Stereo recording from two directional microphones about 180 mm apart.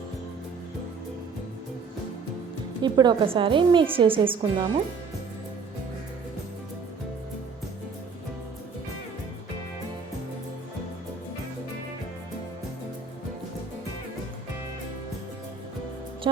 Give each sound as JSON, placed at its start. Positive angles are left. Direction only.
{"t": 2.8, "sound": "a woman's voice", "side_deg": -25}
{"t": 16.2, "sound": "music", "side_deg": -25}